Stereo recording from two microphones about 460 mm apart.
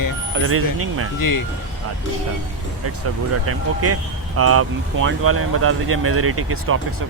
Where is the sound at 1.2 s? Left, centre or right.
Left.